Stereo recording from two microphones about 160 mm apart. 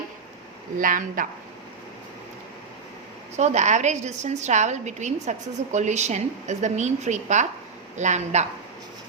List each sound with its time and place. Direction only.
0.8 s speech: 55° right (ahead or behind)
3.3 s a woman's voice: 45° right (ahead or behind)